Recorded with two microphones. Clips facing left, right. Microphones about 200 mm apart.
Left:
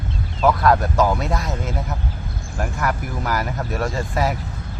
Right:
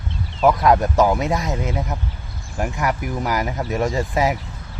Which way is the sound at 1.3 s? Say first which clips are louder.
Right 2 dB; centre (ahead or behind).